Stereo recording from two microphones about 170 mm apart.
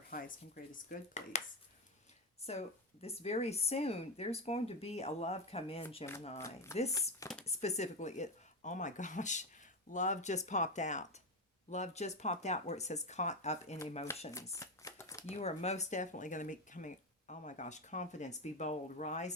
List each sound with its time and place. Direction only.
0.1 s speech: 55° left (ahead or behind)
2.5 s speech: 40° left (ahead or behind)
6.4 s speech: 15° left (ahead or behind)
7.4 s speech: 40° left (ahead or behind)
14.5 s shuffling cards: 20° left (ahead or behind)
15.3 s speech: 40° left (ahead or behind)